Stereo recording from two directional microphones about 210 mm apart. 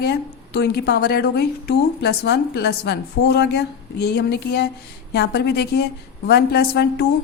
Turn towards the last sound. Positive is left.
turn(degrees=50)  # may be behind; listen again after turning